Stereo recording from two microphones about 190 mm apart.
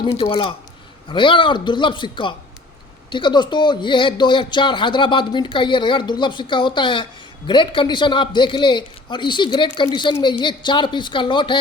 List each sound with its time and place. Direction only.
0.0 s speech: 30° left (ahead or behind)